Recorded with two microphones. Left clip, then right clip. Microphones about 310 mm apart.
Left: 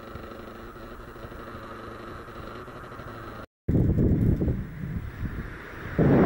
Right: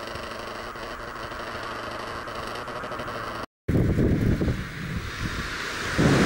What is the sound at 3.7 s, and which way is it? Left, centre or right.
Vehicle, centre.